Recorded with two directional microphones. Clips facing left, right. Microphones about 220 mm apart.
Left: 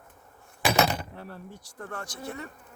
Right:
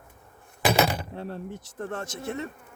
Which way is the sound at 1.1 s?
25° right (ahead or behind).